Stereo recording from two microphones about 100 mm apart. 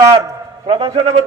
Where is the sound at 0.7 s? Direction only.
70° right (ahead or behind).